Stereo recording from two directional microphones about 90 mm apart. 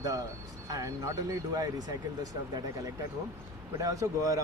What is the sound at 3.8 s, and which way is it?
Speech, 40° right (ahead or behind).